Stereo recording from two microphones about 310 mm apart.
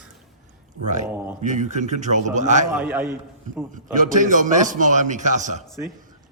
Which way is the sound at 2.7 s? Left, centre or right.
Centre.